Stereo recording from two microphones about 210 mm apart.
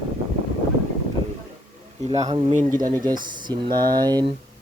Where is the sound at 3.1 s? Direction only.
20° right (ahead or behind).